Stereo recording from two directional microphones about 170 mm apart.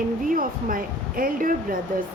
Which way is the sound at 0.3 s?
55° right (ahead or behind).